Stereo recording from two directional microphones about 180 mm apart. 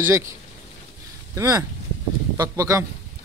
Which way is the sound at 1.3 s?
15° right (ahead or behind).